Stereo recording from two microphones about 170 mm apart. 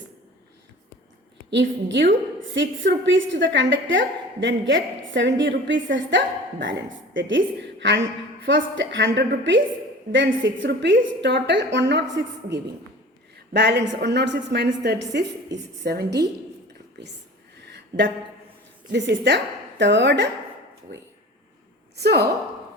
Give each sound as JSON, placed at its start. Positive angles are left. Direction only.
{"t": 1.5, "sound": "a woman's voice", "side_deg": -90}
{"t": 15.5, "sound": "a woman's voice", "side_deg": -70}
{"t": 17.7, "sound": "a sound", "side_deg": -90}
{"t": 18.9, "sound": "a woman's voice", "side_deg": -90}
{"t": 21.9, "sound": "a woman's voice", "side_deg": -70}